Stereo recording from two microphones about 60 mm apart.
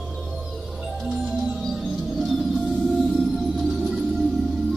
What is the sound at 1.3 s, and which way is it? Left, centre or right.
Music, centre.